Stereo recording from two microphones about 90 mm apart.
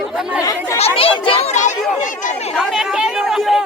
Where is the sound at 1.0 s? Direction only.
85° left.